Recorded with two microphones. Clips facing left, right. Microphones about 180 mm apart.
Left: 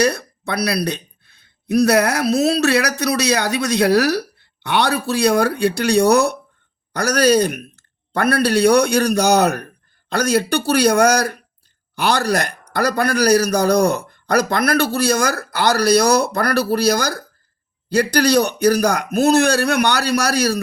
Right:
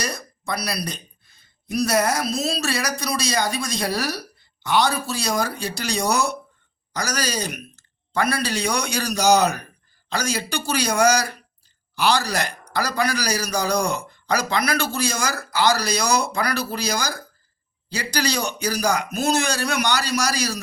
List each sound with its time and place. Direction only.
0.0 s speech: 65° left (ahead or behind)